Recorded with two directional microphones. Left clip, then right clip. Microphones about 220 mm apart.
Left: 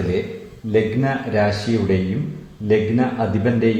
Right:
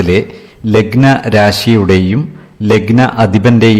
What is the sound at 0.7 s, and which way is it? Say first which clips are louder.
A man's voice: right 10 dB; 45° right (ahead or behind).